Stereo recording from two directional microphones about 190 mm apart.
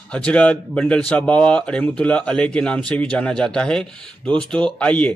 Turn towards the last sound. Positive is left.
turn(degrees=5)  # may be behind; listen again after turning